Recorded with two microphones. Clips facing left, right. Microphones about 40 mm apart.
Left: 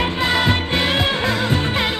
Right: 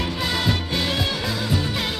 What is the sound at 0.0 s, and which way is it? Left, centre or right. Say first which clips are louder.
Music: left 6 dB; left.